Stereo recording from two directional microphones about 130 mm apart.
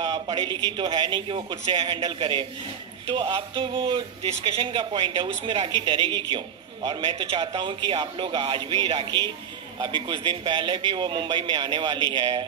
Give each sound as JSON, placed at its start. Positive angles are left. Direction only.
{"t": 0.0, "sound": "speech", "side_deg": -35}